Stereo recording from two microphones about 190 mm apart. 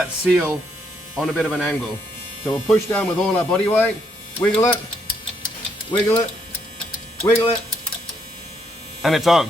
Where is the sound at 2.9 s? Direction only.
5° left (ahead or behind).